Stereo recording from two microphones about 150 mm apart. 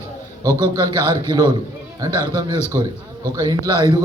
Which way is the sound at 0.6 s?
25° right (ahead or behind).